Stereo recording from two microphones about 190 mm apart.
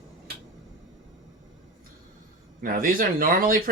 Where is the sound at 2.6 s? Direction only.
45° right (ahead or behind).